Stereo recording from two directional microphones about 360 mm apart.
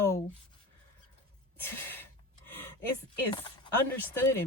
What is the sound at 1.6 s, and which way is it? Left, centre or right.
Speech, centre.